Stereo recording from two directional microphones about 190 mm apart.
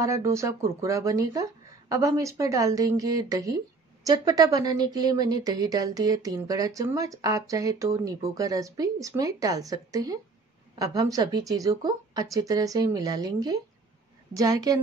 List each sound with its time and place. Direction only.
0.0 s speech: 15° right (ahead or behind)